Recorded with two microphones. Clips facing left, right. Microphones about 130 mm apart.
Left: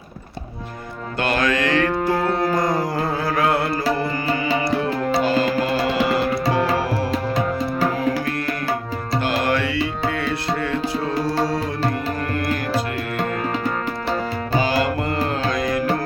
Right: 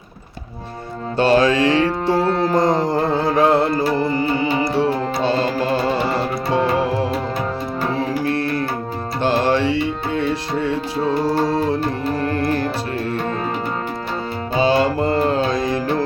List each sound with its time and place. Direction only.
1.2 s music: 30° right (ahead or behind)
6.5 s music: 20° right (ahead or behind)
9.2 s music: 25° right (ahead or behind)
14.6 s music: 25° right (ahead or behind)